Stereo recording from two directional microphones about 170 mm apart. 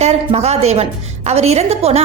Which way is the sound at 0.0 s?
40° right (ahead or behind).